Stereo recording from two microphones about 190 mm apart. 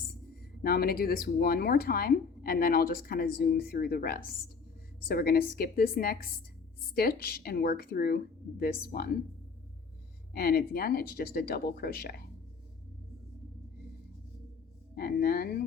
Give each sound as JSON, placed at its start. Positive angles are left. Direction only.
{"t": 0.6, "sound": "speech", "side_deg": 50}
{"t": 10.3, "sound": "speech", "side_deg": 55}
{"t": 14.9, "sound": "speech", "side_deg": 50}